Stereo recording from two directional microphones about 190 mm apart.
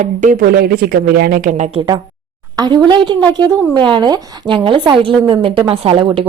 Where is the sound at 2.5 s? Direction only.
20° right (ahead or behind).